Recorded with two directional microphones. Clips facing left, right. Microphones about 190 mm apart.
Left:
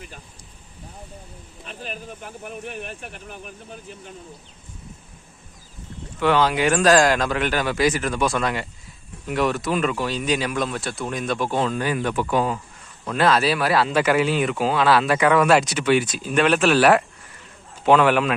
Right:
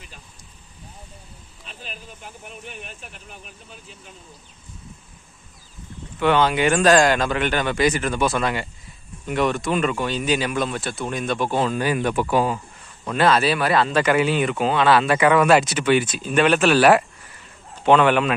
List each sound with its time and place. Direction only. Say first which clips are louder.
1.6 s speech: left 6 dB; 50° left (ahead or behind)
6.1 s speech: right 1 dB; centre (ahead or behind)